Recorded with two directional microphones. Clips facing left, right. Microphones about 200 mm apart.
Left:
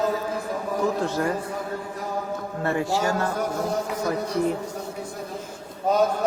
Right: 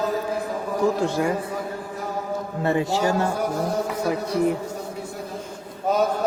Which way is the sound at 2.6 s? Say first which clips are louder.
Right 2 dB; 20° right (ahead or behind).